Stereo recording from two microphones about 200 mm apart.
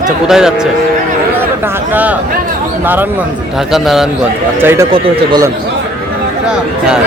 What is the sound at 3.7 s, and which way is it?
A man's voice, centre (ahead or behind).